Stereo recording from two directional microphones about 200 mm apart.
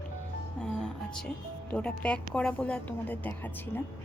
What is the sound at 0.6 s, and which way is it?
A woman's voice, 5° left (ahead or behind).